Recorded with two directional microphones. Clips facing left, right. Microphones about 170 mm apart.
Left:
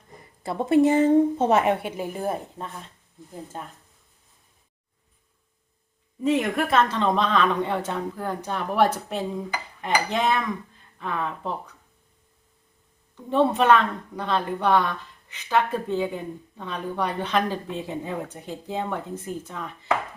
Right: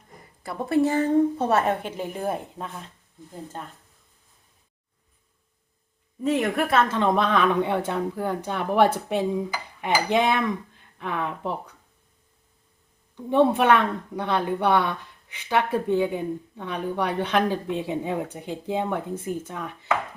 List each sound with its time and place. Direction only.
0.4 s a woman's voice: 20° left (ahead or behind); by 3.7 s 5° left (ahead or behind)
6.2 s a woman's voice: centre (ahead or behind)
13.3 s a woman's voice: 15° right (ahead or behind)